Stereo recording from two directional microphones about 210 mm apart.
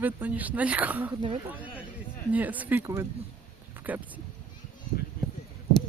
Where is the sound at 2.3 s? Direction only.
10° right (ahead or behind).